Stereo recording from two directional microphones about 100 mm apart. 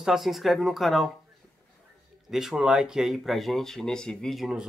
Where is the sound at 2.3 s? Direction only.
5° right (ahead or behind).